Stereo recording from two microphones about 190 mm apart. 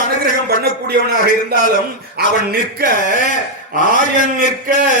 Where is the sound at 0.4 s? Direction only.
55° right (ahead or behind).